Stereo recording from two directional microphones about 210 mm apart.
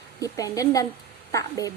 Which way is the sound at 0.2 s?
15° left (ahead or behind).